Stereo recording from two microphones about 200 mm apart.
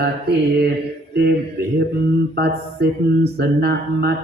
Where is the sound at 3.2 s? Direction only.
55° right (ahead or behind).